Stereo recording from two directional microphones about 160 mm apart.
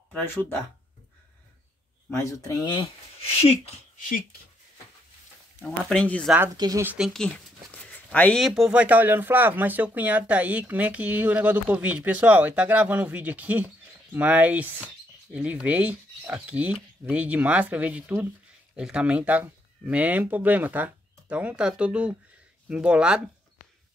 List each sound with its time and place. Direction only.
0.1 s speech: 10° left (ahead or behind)
2.1 s speech: 20° left (ahead or behind); by 3.5 s 40° left (ahead or behind)
5.6 s speech: 5° left (ahead or behind)
6.5 s speech: 25° right (ahead or behind)
6.8 s speech: 10° right (ahead or behind)
7.2 s speech: 5° left (ahead or behind)
8.4 s speech: centre (ahead or behind)